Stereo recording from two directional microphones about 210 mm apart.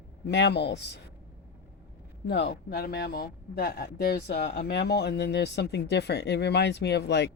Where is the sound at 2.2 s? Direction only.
55° left (ahead or behind).